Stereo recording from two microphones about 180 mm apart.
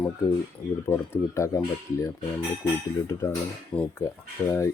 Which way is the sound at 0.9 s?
15° left (ahead or behind).